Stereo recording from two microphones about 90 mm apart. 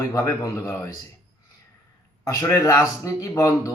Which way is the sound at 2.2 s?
35° left (ahead or behind).